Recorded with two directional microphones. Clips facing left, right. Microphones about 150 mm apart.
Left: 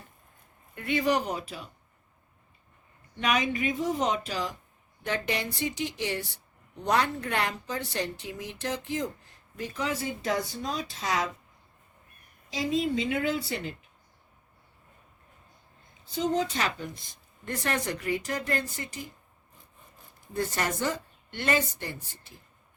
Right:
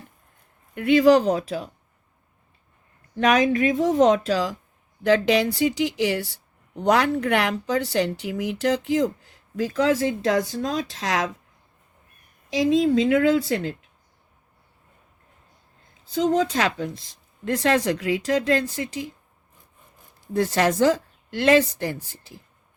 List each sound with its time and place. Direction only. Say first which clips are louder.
0.7 s speech: right 11 dB; 80° right
3.2 s speech: right 9 dB; 90° right
12.5 s speech: right 9 dB; 90° right
16.0 s speech: right 7 dB; 90° right
20.2 s speech: right 9 dB; 90° right